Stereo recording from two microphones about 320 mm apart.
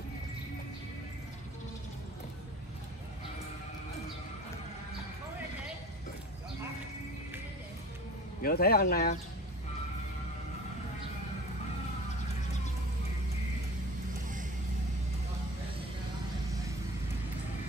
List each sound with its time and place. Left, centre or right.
8.4 s speech: left